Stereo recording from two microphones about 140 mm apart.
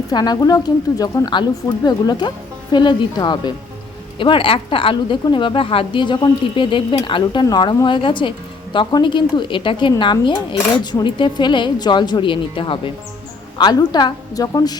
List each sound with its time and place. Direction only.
0.1 s a woman's voice: 30° left (ahead or behind)